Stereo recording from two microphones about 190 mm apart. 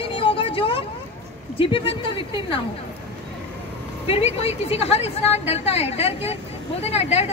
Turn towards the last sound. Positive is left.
turn(degrees=35)  # may be behind; listen again after turning